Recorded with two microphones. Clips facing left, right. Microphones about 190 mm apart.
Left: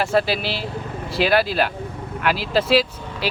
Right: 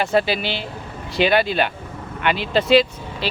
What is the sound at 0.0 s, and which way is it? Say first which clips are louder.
Speech: right 1 dB; centre (ahead or behind).